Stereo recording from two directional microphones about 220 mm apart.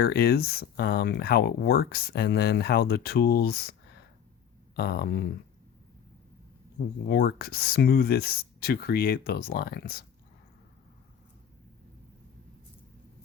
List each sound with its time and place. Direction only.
0.0 s speech: 45° left (ahead or behind)
7.1 s speech: 45° left (ahead or behind)